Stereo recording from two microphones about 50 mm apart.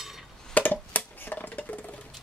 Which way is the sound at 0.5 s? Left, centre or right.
Left.